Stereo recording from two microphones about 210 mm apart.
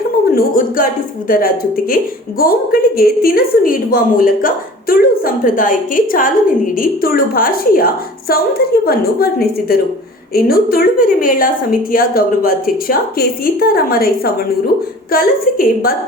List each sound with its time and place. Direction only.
0.3 s a woman's voice: 40° left (ahead or behind)